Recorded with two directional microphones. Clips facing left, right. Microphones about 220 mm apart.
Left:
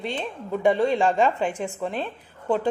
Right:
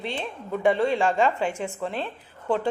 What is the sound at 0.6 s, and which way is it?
Speech, 20° left (ahead or behind).